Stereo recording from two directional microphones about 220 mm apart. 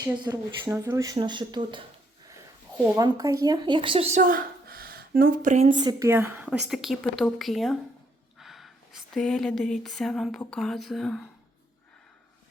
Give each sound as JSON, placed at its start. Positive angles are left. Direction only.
{"t": 0.0, "sound": "speech", "side_deg": -15}
{"t": 2.9, "sound": "speech", "side_deg": -15}
{"t": 4.2, "sound": "speech", "side_deg": -40}
{"t": 5.7, "sound": "a woman's voice", "side_deg": -20}